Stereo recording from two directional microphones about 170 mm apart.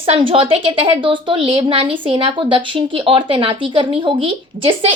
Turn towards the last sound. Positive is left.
turn(degrees=-30)  # may be behind; listen again after turning